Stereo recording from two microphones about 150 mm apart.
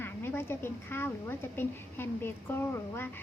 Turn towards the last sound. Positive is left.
turn(degrees=15)  # may be behind; listen again after turning